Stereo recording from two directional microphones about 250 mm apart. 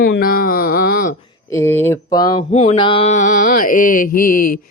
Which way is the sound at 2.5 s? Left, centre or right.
Left.